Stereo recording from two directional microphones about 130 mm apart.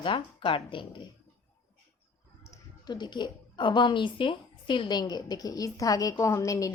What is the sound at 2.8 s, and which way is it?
A woman's voice, 35° left (ahead or behind).